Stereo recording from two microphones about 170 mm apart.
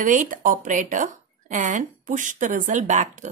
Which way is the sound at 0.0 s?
50° right (ahead or behind).